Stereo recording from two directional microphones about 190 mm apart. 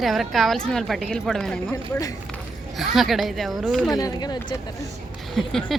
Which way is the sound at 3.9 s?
20° left (ahead or behind).